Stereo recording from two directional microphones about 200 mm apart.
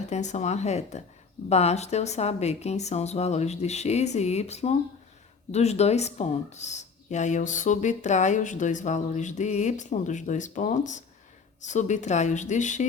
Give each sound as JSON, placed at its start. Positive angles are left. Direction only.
{"t": 0.1, "sound": "speech", "side_deg": 35}